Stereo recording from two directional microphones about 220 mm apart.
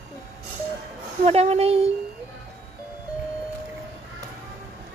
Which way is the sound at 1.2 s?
30° right (ahead or behind).